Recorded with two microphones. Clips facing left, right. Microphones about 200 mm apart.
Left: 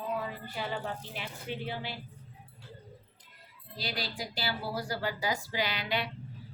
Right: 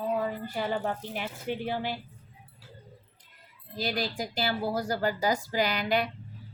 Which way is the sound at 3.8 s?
45° right (ahead or behind).